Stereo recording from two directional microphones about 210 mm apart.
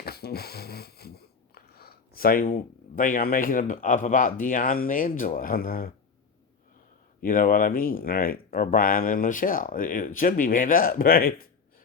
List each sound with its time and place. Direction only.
0.0 s speech: 50° left (ahead or behind)
7.2 s speech: 40° left (ahead or behind)